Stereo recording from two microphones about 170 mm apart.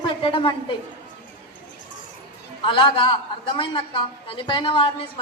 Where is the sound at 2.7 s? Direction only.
30° left (ahead or behind).